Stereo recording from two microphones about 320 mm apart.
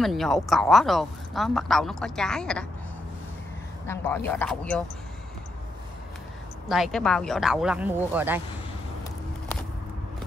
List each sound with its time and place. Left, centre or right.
0.0 s speech: centre
3.8 s speech: centre
6.7 s speech: centre